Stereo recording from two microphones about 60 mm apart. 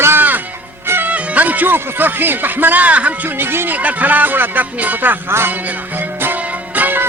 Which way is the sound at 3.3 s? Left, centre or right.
Right.